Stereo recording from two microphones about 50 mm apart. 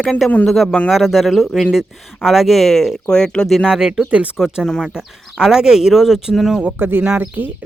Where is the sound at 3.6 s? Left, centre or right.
Centre.